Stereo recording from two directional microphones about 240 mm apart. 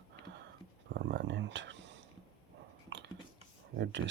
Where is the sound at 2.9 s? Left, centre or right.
Right.